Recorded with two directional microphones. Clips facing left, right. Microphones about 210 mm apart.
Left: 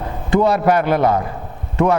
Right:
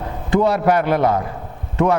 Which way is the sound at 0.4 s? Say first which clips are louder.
Left 1 dB; 10° left (ahead or behind).